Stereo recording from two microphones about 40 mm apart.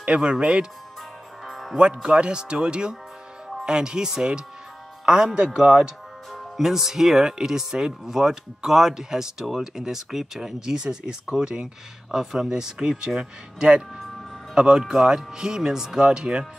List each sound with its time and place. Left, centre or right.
0.0 s speech: right
1.4 s music: centre
2.0 s speech: right
6.3 s speech: centre; by 11.7 s right
12.1 s speech: centre
13.9 s music: centre
14.5 s speech: centre